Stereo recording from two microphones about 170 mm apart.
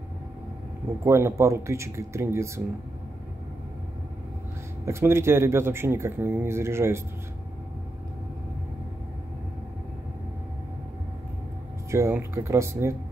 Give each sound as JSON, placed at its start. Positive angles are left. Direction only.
{"t": 1.0, "sound": "speech", "side_deg": -15}
{"t": 4.8, "sound": "speech", "side_deg": -15}
{"t": 11.9, "sound": "speech", "side_deg": -15}